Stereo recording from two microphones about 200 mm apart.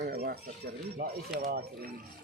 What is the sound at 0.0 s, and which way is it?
Speech, 50° right (ahead or behind).